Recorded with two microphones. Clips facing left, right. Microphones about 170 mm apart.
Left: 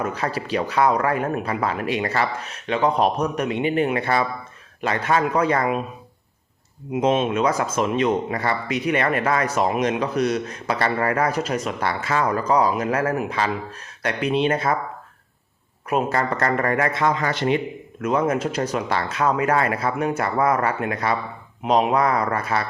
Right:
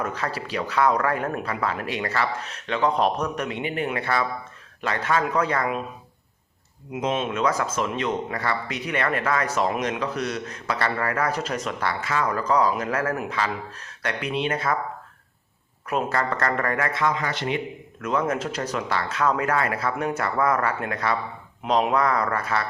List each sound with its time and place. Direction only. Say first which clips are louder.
0.0 s speech: left 3 dB; 15° left (ahead or behind)
6.9 s speech: left 6 dB; 25° left (ahead or behind); by 11.9 s 10° left (ahead or behind)
12.0 s speech: left 4 dB; 30° left (ahead or behind)
12.4 s speech: left 2 dB; 15° left (ahead or behind); by 14.7 s 30° left (ahead or behind)
15.9 s speech: left 3 dB; 15° left (ahead or behind)
17.2 s speech: left 5 dB; 45° left (ahead or behind)
18.0 s speech: left 4 dB; 15° left (ahead or behind)